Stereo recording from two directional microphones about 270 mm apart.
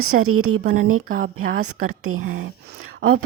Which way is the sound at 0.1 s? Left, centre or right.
Right.